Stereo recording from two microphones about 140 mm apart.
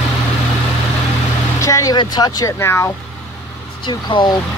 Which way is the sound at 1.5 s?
20° left (ahead or behind).